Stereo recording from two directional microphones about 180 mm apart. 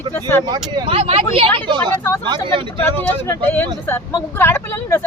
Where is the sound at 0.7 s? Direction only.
30° right (ahead or behind).